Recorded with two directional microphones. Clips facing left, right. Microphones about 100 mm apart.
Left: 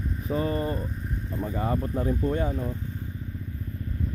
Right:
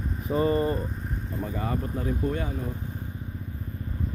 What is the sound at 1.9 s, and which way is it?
Speech, 30° left (ahead or behind).